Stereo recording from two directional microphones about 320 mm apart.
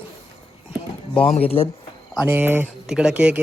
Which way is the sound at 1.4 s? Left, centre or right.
Centre.